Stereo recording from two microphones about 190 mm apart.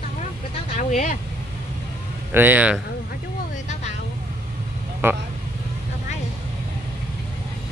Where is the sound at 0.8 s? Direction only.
40° left (ahead or behind).